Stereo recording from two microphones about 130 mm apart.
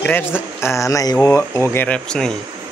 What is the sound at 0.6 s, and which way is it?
Speech, 20° left (ahead or behind).